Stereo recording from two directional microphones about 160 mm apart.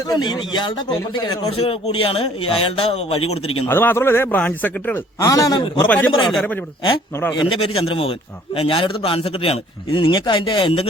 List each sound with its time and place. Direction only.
0.1 s a man's voice: 30° left (ahead or behind)
3.7 s speech: 15° left (ahead or behind)
5.2 s a man's voice: 20° left (ahead or behind)
5.8 s speech: 10° left (ahead or behind)
7.4 s a man's voice: 35° left (ahead or behind)